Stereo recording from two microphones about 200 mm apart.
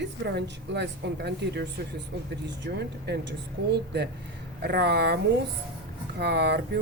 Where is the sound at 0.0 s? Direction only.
60° right (ahead or behind).